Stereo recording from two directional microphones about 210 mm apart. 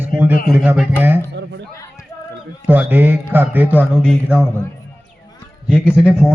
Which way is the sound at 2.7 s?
10° right (ahead or behind).